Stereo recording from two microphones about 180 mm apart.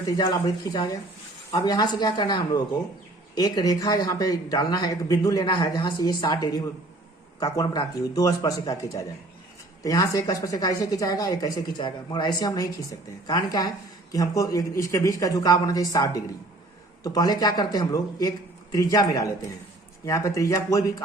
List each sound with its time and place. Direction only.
0.0 s speech: 20° left (ahead or behind)